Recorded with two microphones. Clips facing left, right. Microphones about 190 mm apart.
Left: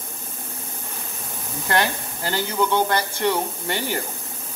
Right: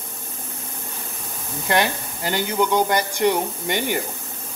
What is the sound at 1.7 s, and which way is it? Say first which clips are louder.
Speech: right 2 dB; 15° right (ahead or behind).